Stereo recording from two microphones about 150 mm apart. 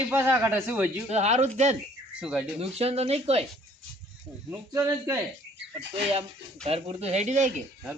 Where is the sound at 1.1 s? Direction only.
45° right (ahead or behind).